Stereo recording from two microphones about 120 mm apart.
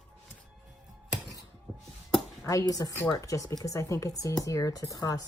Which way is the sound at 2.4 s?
30° left (ahead or behind).